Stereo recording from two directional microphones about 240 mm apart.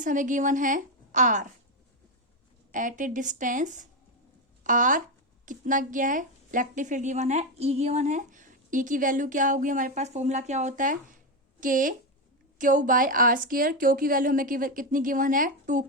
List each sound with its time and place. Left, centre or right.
0.0 s a woman's voice: right
2.7 s a woman's voice: right